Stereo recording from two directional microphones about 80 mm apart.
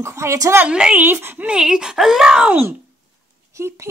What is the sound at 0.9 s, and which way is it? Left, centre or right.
Speech, right.